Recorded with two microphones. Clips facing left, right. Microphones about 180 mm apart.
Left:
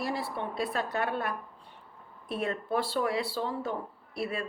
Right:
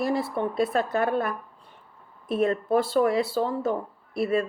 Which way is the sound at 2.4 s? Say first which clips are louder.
Right 8 dB; 40° right (ahead or behind).